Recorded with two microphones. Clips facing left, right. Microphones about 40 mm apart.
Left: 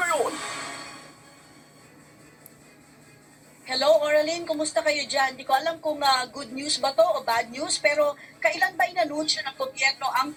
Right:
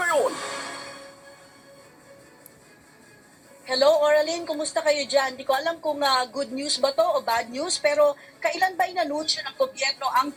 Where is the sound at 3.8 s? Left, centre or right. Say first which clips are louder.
Right 1 dB; centre.